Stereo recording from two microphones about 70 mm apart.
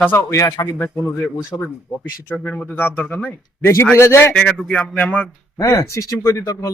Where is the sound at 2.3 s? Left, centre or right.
Centre.